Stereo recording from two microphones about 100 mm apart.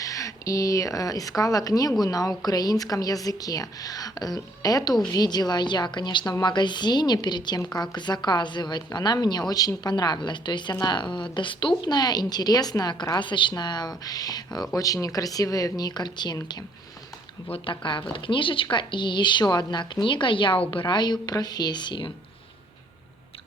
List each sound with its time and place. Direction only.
0.0 s a woman's voice: 35° left (ahead or behind)
17.5 s speech: 55° left (ahead or behind)